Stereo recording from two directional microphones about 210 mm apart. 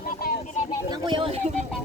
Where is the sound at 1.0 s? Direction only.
25° right (ahead or behind).